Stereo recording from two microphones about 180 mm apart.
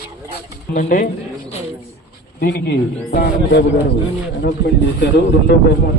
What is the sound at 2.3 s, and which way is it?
A man's voice, 55° left (ahead or behind).